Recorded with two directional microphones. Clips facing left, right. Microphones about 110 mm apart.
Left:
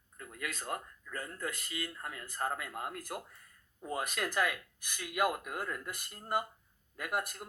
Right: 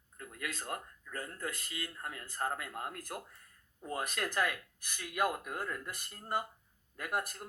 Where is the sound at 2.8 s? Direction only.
15° left (ahead or behind).